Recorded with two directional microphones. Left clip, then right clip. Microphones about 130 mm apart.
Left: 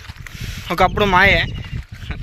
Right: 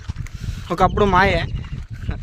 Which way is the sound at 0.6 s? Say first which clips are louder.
Left 1 dB; 35° right (ahead or behind).